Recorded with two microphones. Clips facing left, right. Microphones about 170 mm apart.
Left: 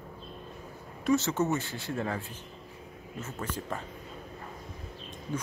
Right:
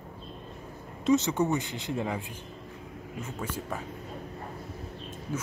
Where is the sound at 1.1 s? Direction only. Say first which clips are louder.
Right 2 dB; 15° right (ahead or behind).